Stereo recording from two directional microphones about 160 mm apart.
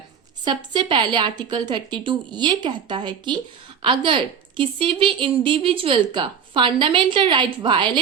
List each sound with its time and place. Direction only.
0.4 s a woman's voice: 30° right (ahead or behind)